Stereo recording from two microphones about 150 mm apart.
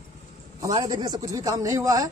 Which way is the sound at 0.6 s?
30° right (ahead or behind).